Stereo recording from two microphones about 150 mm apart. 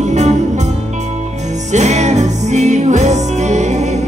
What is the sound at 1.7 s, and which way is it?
Music, 50° right (ahead or behind).